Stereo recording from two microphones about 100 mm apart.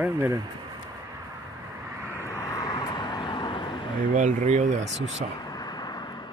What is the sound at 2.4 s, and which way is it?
Vehicle, 40° left (ahead or behind).